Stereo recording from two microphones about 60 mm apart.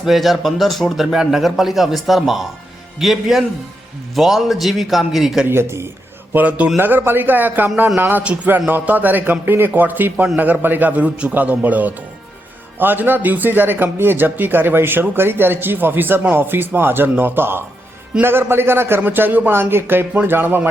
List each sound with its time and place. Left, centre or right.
0.0 s a man's voice: centre
5.5 s speech: right
6.3 s a man's voice: right
6.7 s a man's voice: right